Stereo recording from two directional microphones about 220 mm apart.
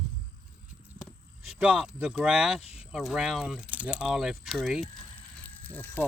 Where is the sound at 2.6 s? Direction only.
25° left (ahead or behind).